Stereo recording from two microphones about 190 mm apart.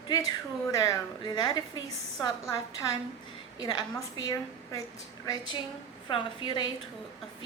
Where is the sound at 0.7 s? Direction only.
15° left (ahead or behind).